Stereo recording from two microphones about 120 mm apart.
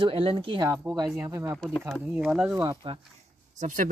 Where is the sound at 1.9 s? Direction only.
10° right (ahead or behind).